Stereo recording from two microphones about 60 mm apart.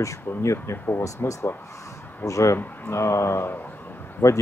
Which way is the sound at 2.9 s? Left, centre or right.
Left.